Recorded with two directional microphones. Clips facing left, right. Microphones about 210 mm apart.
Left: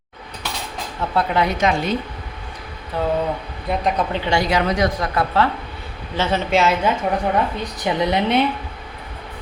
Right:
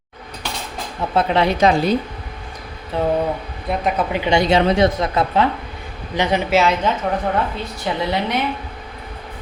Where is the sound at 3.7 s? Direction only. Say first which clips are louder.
Right 1 dB; 5° right (ahead or behind).